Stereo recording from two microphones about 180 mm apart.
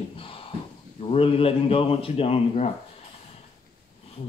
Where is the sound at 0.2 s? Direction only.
30° left (ahead or behind).